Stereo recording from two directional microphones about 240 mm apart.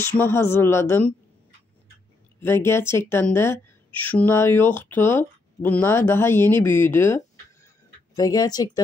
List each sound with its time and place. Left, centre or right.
0.0 s a woman's voice: centre
2.4 s a woman's voice: centre
8.2 s a woman's voice: centre